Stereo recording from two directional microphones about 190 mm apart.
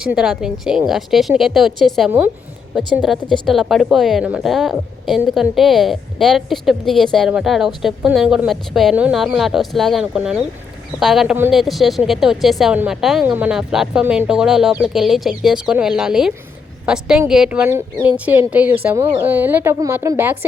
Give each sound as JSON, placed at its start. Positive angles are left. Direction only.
{"t": 0.0, "sound": "a woman's voice", "side_deg": -5}